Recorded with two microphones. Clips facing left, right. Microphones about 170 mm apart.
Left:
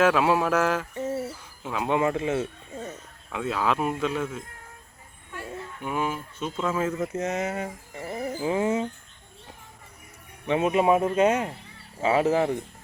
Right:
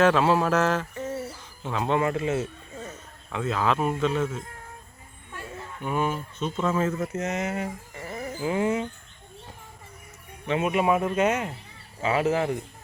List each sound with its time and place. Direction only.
0.0 s speech: 10° left (ahead or behind)
5.8 s speech: 10° left (ahead or behind)
7.2 s a sound: 20° left (ahead or behind)
8.4 s speech: 25° left (ahead or behind)
10.4 s speech: 25° left (ahead or behind)